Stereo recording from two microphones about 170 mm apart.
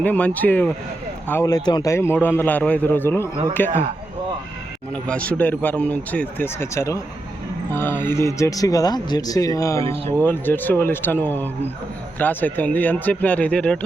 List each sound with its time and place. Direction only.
0.0 s a man's voice: 10° left (ahead or behind)
5.0 s a man's voice: 5° left (ahead or behind)